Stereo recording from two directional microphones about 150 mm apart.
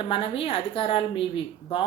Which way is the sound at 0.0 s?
35° left (ahead or behind).